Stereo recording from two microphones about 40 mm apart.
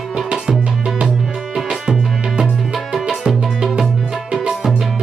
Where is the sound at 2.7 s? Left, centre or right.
Centre.